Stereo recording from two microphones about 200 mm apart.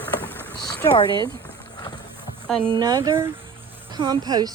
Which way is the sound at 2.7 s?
20° right (ahead or behind).